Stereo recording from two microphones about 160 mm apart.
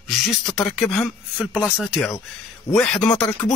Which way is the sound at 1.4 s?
5° right (ahead or behind).